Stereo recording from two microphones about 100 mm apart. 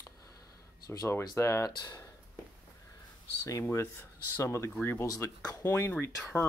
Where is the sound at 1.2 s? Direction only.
30° left (ahead or behind).